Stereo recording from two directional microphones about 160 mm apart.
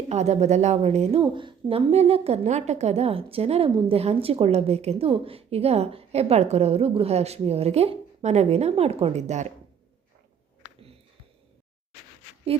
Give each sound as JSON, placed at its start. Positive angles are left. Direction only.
{"t": 0.1, "sound": "a woman's voice", "side_deg": -45}
{"t": 1.2, "sound": "a woman's voice", "side_deg": -30}